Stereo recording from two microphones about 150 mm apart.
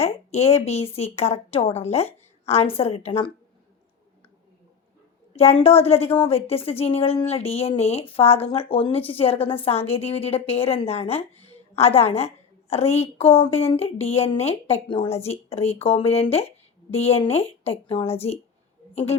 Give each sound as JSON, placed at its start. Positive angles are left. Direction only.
{"t": 0.0, "sound": "a woman's voice", "side_deg": 45}
{"t": 5.5, "sound": "a woman's voice", "side_deg": 40}